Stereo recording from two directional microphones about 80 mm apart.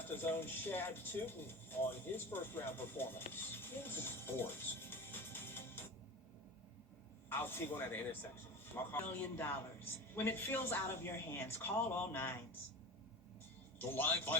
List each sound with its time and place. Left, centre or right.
0.0 s speech: left
7.3 s a woman's voice: left
13.7 s a woman's voice: left